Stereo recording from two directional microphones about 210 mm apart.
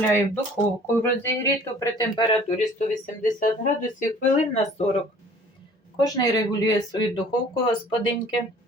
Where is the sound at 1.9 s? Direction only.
25° left (ahead or behind).